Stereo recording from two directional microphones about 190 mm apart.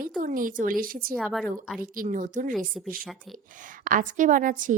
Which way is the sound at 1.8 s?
45° right (ahead or behind).